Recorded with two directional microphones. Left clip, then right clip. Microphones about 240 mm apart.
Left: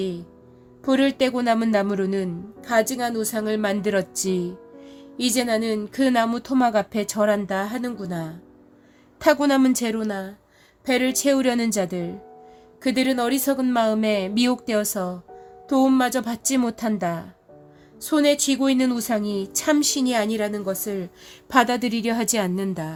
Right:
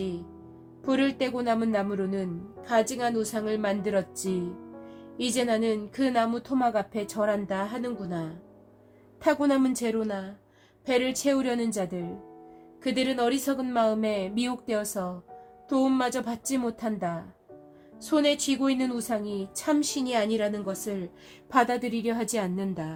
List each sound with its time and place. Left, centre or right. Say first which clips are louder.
0.9 s a man's voice: left 6 dB; left